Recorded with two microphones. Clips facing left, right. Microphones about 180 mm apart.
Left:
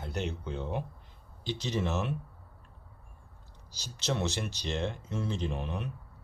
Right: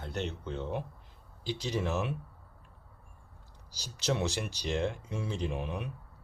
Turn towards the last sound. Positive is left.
turn(degrees=-10)  # may be behind; listen again after turning